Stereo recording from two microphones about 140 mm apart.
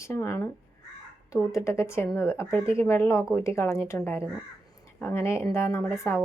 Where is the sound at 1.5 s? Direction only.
20° left (ahead or behind).